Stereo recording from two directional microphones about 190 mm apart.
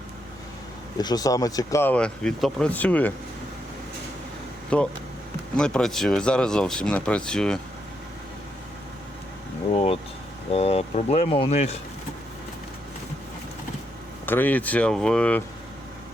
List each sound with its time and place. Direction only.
0.9 s speech: 20° left (ahead or behind)
4.7 s speech: 5° left (ahead or behind)
9.7 s vehicle: 30° left (ahead or behind)
10.5 s speech: 30° left (ahead or behind)
14.3 s speech: 10° left (ahead or behind)